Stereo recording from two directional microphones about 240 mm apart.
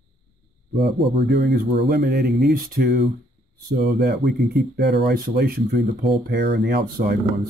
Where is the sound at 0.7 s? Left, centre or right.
Right.